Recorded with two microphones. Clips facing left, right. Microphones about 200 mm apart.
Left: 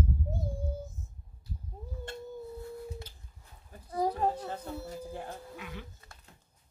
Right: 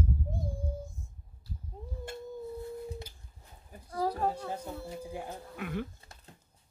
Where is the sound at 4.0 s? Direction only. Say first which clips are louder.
Left 1 dB; 20° left (ahead or behind).